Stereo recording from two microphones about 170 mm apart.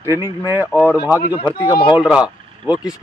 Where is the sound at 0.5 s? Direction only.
10° right (ahead or behind).